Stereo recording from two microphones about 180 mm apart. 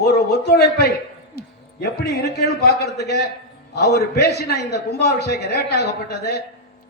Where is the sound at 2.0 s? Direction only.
65° left (ahead or behind).